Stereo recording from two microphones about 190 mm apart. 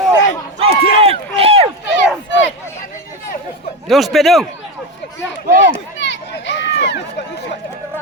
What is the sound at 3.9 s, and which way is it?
Speech, centre (ahead or behind).